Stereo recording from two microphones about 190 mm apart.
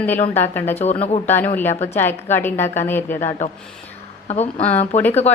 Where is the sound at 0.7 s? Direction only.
35° left (ahead or behind).